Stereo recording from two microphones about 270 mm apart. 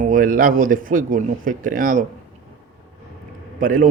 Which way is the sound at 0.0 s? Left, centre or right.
Right.